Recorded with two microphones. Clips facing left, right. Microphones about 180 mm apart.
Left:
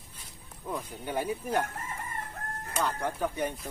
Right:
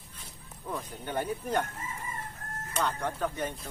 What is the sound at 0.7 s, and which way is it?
Speech, 10° left (ahead or behind).